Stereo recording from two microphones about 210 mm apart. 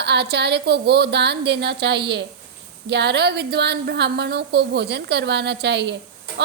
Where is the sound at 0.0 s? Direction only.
55° right (ahead or behind).